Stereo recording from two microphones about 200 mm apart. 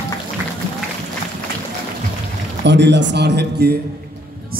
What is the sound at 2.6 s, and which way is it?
A man's voice, 60° right (ahead or behind).